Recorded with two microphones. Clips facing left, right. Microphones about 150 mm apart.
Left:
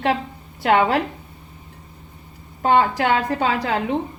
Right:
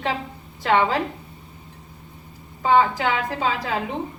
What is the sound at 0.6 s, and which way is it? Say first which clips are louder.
Speech: left 3 dB; 70° left (ahead or behind).